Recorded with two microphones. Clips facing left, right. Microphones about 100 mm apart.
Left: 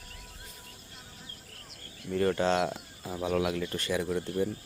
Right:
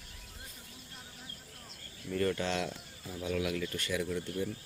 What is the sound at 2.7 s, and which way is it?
Speech, 55° left (ahead or behind).